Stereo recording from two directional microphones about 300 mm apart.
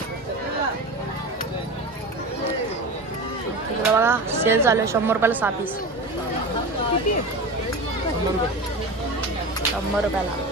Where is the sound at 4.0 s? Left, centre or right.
Centre.